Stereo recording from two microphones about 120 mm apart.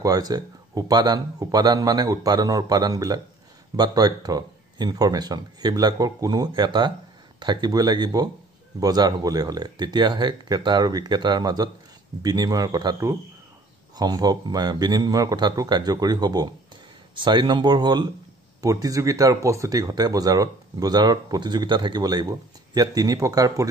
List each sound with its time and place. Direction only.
0.0 s speech: 30° right (ahead or behind)